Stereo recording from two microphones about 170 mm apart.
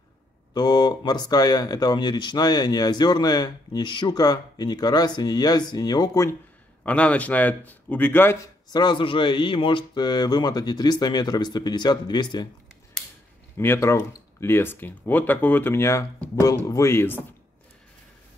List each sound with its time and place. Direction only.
0.6 s speech: 25° left (ahead or behind)
6.8 s speech: 10° left (ahead or behind)
8.6 s speech: 25° left (ahead or behind)
13.6 s speech: 15° left (ahead or behind)